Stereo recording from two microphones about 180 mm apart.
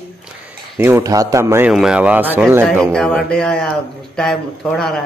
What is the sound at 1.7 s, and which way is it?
Speech, 5° right (ahead or behind).